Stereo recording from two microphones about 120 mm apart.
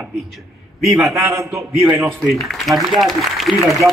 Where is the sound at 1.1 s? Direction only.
25° right (ahead or behind).